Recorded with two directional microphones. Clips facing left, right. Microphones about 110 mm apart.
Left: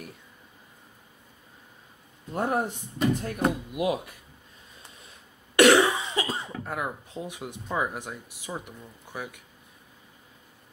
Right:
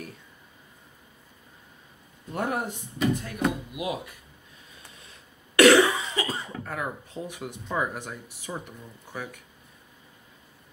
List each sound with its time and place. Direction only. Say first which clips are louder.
2.3 s speech: left 2 dB; 25° left (ahead or behind)
3.3 s speech: left 1 dB; 40° left (ahead or behind)
5.6 s cough: right 1 dB; 20° left (ahead or behind)
6.6 s speech: left 1 dB; 15° left (ahead or behind)